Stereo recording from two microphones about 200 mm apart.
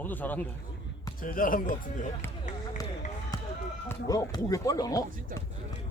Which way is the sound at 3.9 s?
15° left (ahead or behind).